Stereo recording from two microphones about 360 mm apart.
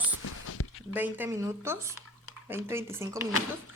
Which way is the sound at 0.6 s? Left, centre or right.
Left.